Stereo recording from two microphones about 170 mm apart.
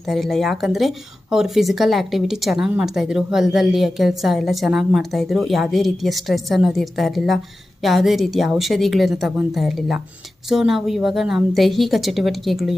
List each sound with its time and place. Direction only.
0.1 s speech: centre (ahead or behind)